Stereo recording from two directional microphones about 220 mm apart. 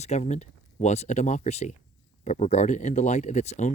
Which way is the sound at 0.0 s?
30° left (ahead or behind).